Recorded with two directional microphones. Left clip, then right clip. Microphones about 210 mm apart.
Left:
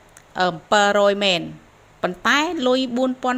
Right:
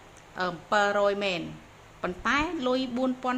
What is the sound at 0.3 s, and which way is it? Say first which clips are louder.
A woman's voice: left 8 dB; 30° left (ahead or behind).